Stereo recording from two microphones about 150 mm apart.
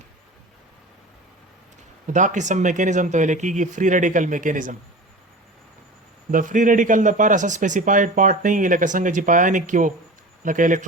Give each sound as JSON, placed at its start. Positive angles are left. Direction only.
{"t": 2.0, "sound": "speech", "side_deg": -55}
{"t": 6.3, "sound": "speech", "side_deg": -60}